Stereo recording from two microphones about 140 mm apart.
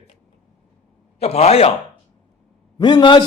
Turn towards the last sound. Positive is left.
turn(degrees=35)  # may be behind; listen again after turning